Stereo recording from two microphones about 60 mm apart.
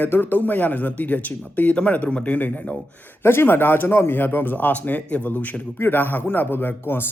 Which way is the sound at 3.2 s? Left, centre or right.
Left.